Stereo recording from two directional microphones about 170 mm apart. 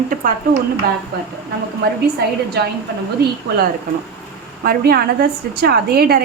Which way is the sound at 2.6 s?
75° right (ahead or behind).